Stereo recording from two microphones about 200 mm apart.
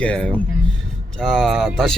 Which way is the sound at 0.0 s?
5° left (ahead or behind).